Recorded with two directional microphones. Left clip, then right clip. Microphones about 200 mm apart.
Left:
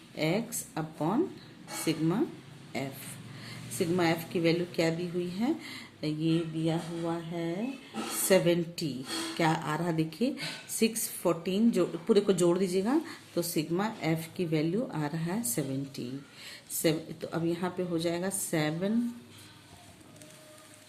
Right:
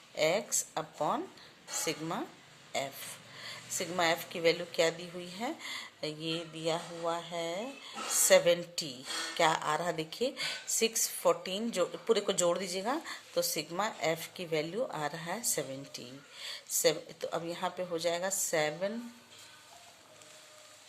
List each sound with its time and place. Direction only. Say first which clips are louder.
0.2 s a woman's voice: right 2 dB; 25° right (ahead or behind)
8.3 s a woman's voice: even; 25° right (ahead or behind)